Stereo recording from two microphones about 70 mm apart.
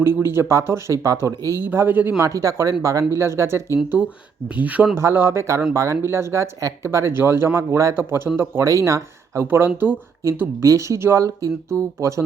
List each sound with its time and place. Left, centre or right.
0.0 s speech: right
1.6 s speech: right
2.1 s speech: right
4.4 s speech: right
4.9 s speech: right
6.8 s speech: right
7.9 s speech: right
8.6 s speech: right
9.5 s speech: right
10.6 s speech: right